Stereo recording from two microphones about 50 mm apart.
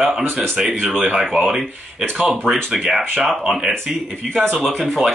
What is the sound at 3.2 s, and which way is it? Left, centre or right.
Speech, centre.